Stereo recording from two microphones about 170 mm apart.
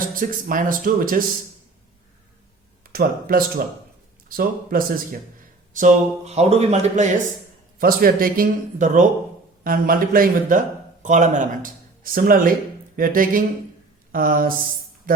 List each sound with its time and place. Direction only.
0.1 s a man's voice: 55° right (ahead or behind)
2.8 s a man's voice: 60° right (ahead or behind)
5.7 s speech: 45° right (ahead or behind)
7.8 s a man's voice: 60° right (ahead or behind)